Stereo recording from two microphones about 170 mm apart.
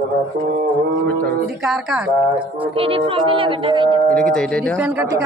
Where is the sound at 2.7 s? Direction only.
30° right (ahead or behind).